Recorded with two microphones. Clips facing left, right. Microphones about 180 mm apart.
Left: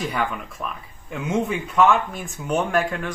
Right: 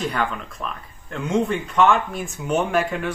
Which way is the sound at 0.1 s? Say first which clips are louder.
Right 1 dB; 5° left (ahead or behind).